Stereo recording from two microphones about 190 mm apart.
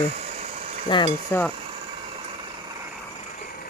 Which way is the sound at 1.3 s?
10° left (ahead or behind).